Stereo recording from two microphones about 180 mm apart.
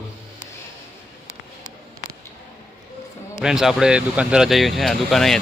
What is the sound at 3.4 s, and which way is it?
Speech, centre (ahead or behind).